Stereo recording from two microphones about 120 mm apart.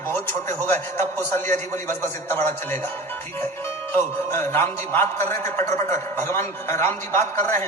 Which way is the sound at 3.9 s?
20° left (ahead or behind).